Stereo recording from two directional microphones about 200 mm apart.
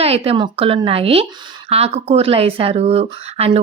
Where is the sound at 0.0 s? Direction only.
30° right (ahead or behind).